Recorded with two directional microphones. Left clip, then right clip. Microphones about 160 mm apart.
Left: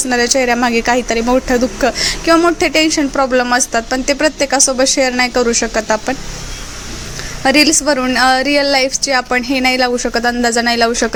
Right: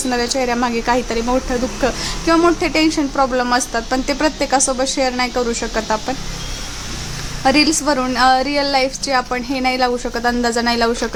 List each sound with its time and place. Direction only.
0.1 s a woman's voice: 20° left (ahead or behind)
7.4 s a woman's voice: 20° left (ahead or behind)